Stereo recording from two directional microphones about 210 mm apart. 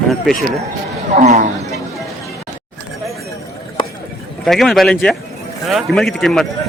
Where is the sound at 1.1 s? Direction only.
35° right (ahead or behind).